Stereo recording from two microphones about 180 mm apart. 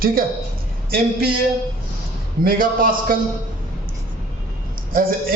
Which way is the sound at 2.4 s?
55° right (ahead or behind).